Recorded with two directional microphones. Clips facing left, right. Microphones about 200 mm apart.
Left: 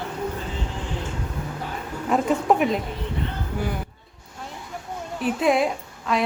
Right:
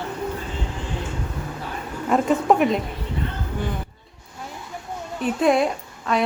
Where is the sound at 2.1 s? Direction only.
Centre (ahead or behind).